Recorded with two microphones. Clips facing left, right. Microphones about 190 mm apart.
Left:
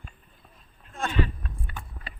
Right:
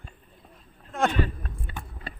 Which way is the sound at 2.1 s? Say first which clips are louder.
Right 4 dB; 45° right (ahead or behind).